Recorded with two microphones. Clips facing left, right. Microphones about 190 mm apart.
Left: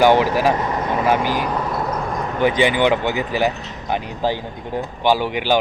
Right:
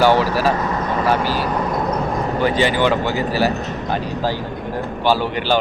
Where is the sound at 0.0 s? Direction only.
15° left (ahead or behind).